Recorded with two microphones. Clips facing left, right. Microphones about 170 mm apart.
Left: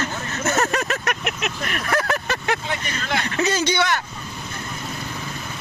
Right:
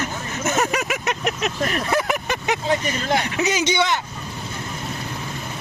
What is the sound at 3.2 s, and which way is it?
Speech, 10° right (ahead or behind).